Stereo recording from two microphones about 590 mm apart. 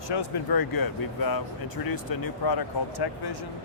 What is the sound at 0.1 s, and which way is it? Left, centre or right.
Speech, left.